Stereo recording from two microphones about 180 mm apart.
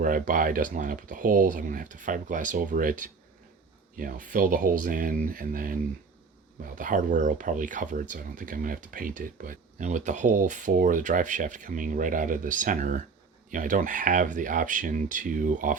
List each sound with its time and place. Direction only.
0.0 s speech: 50° right (ahead or behind)
3.9 s speech: 50° right (ahead or behind)